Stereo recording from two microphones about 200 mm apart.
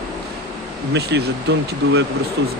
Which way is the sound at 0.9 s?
60° right (ahead or behind).